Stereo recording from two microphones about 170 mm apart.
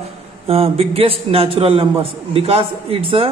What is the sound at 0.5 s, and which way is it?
Speech, 35° right (ahead or behind).